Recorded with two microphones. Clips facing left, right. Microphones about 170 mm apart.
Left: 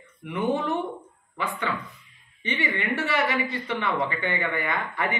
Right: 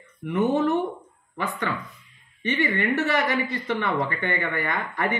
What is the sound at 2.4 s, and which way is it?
Speech, 45° right (ahead or behind).